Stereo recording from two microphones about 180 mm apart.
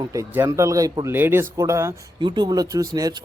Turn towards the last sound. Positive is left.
turn(degrees=-20)  # may be behind; listen again after turning